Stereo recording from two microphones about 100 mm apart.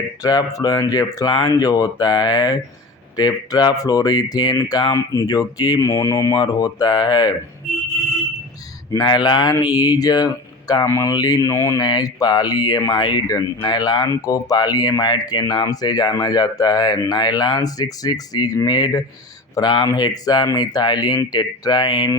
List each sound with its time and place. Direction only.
0.2 s speech: 40° left (ahead or behind)
5.8 s speech: 30° left (ahead or behind)
9.0 s speech: 50° left (ahead or behind); by 11.8 s 30° left (ahead or behind)
11.8 s speech: 40° left (ahead or behind)